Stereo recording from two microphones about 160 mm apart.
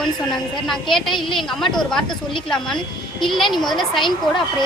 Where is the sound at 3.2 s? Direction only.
Centre (ahead or behind).